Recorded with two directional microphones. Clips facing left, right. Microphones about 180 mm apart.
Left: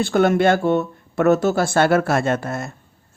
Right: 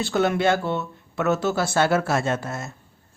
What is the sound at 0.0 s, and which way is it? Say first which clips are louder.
Speech: left 5 dB; 55° left (ahead or behind).